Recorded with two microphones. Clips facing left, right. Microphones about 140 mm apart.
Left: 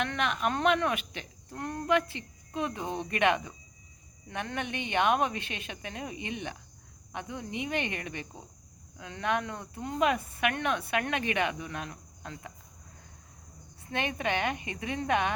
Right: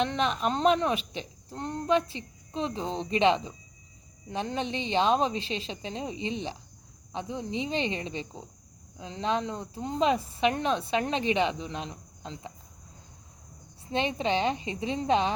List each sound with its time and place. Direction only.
0.0 s a woman's voice: 25° right (ahead or behind)
13.9 s speech: 20° right (ahead or behind)